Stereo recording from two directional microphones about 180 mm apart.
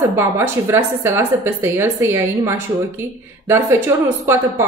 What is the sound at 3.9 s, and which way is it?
Speech, 15° right (ahead or behind).